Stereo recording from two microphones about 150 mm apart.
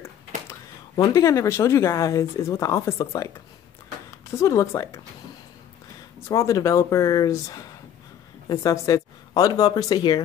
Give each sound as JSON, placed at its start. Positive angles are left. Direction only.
{"t": 0.5, "sound": "speech", "side_deg": 25}
{"t": 6.2, "sound": "speech", "side_deg": 20}